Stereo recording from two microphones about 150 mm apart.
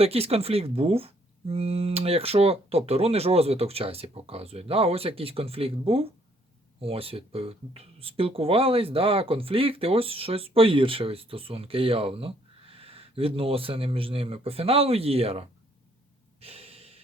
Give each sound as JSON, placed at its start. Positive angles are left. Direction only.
{"t": 0.0, "sound": "speech", "side_deg": -40}
{"t": 16.4, "sound": "gasp", "side_deg": -40}